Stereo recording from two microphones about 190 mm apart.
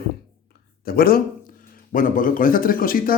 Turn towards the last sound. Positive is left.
turn(degrees=50)  # may be behind; listen again after turning